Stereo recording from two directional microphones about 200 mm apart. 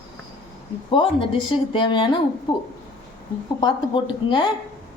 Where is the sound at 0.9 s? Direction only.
25° left (ahead or behind).